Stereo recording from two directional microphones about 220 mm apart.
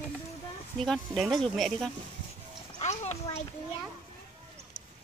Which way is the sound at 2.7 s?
30° left (ahead or behind).